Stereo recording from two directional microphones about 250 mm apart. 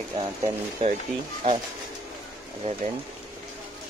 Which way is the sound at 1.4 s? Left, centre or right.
Right.